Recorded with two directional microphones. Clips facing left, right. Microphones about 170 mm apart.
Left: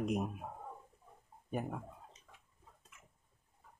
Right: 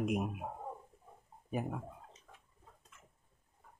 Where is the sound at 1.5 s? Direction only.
5° right (ahead or behind).